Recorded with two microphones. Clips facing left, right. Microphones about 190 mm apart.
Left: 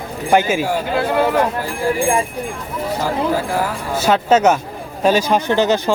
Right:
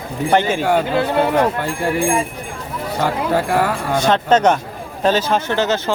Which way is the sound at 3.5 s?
65° right (ahead or behind).